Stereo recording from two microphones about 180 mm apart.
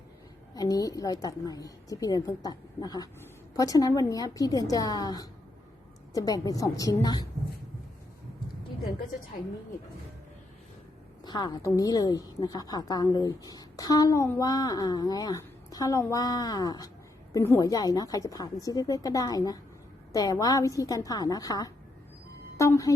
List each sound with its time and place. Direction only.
0.5 s a woman's voice: 20° left (ahead or behind)
11.2 s a woman's voice: 25° left (ahead or behind)